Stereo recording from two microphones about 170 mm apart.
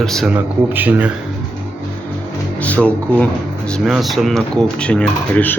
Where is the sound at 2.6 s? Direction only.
10° left (ahead or behind).